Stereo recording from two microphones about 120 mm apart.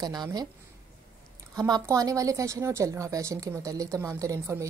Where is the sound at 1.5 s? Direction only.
35° right (ahead or behind).